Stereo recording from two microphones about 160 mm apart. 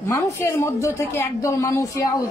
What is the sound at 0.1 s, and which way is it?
A woman's voice, 20° left (ahead or behind).